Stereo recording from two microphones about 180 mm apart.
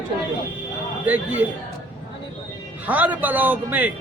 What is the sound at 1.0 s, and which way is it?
Speech, 10° right (ahead or behind).